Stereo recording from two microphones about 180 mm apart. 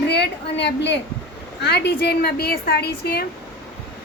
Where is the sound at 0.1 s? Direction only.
70° left (ahead or behind).